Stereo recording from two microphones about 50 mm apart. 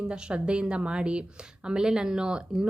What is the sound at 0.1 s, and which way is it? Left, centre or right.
A woman's voice, centre.